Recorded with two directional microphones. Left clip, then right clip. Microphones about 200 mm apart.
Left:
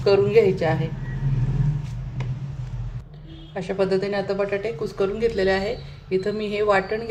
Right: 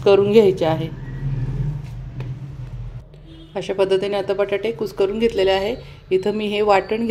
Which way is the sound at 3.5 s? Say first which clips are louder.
Right 4 dB; 40° right (ahead or behind).